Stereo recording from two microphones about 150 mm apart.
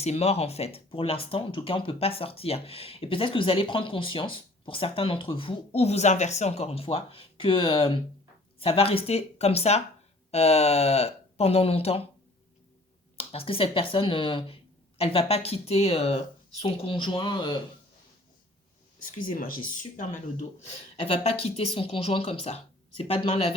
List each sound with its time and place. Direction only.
0.0 s speech: 45° left (ahead or behind)
13.1 s speech: 40° left (ahead or behind)
19.3 s speech: 70° left (ahead or behind)
20.7 s speech: 45° left (ahead or behind)